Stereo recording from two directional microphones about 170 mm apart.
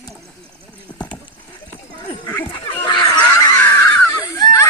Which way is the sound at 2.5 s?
25° left (ahead or behind).